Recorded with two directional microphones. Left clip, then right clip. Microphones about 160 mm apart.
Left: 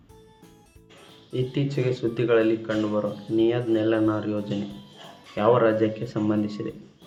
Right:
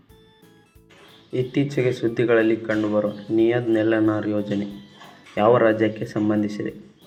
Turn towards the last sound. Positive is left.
turn(degrees=-15)  # may be behind; listen again after turning